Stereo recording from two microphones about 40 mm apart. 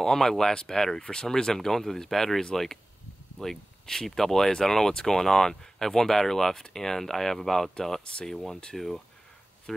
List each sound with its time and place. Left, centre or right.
0.0 s speech: centre
8.0 s speech: left
8.7 s speech: centre
9.7 s speech: centre